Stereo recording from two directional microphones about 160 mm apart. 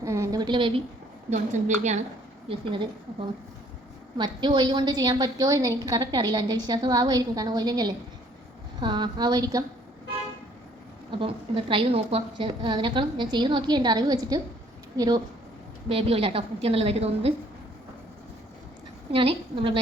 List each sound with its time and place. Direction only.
0.0 s a sound: 20° right (ahead or behind)
1.3 s a woman's voice: 50° right (ahead or behind)
2.5 s a woman's voice: 35° right (ahead or behind)
11.1 s a woman's voice: 35° right (ahead or behind)
15.9 s a woman's voice: 35° right (ahead or behind)
19.1 s a woman's voice: 35° right (ahead or behind)